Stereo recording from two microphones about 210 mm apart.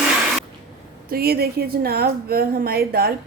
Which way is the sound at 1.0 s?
45° right (ahead or behind).